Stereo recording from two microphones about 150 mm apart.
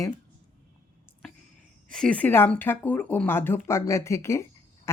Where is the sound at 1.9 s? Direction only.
5° left (ahead or behind).